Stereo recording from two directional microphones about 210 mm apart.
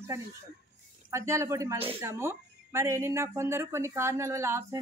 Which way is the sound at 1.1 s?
15° right (ahead or behind).